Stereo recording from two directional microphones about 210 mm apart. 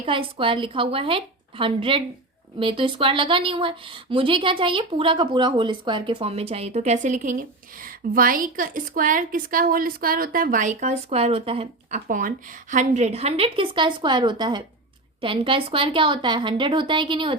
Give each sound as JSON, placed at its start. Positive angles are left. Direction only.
{"t": 0.0, "sound": "a woman's voice", "side_deg": -25}